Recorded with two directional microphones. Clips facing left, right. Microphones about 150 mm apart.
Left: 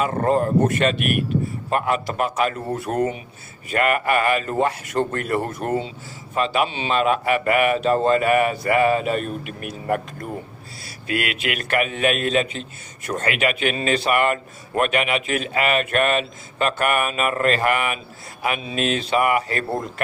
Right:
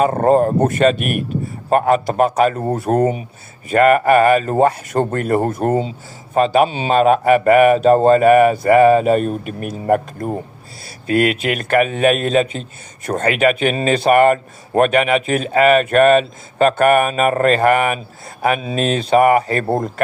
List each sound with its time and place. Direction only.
0.0 s speech: 35° right (ahead or behind)